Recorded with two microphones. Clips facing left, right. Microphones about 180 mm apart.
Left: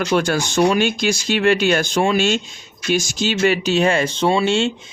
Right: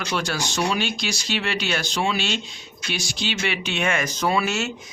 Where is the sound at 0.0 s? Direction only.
50° left (ahead or behind).